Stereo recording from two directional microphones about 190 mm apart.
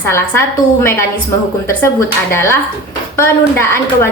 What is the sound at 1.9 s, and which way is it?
Speech, 15° left (ahead or behind).